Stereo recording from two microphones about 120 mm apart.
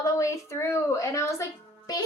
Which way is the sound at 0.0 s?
25° left (ahead or behind).